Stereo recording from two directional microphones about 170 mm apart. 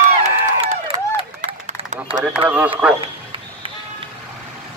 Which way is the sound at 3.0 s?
30° right (ahead or behind).